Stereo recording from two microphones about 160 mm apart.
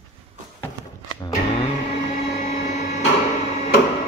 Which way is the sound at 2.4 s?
50° left (ahead or behind).